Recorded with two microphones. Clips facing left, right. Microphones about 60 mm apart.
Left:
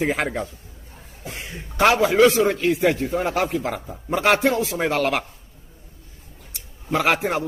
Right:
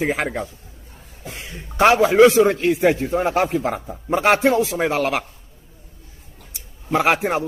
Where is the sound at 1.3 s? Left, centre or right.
Left.